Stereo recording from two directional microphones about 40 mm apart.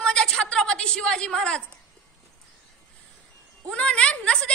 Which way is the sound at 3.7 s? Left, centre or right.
Left.